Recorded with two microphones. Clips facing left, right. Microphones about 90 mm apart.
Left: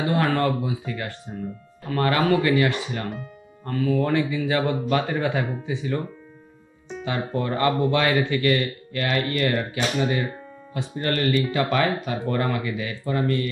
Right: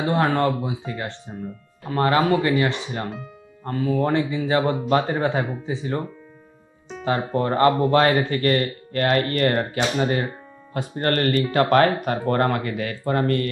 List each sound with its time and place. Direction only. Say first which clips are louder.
0.0 s speech: right 2 dB; 25° right (ahead or behind)
7.1 s speech: right 4 dB; 40° right (ahead or behind)